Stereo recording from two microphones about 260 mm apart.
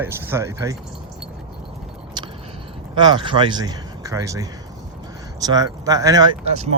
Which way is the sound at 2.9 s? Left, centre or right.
Centre.